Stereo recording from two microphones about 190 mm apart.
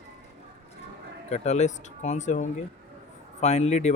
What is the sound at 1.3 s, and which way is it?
Speech, 35° left (ahead or behind).